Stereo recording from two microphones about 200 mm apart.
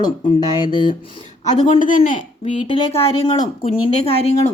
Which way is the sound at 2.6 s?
25° left (ahead or behind).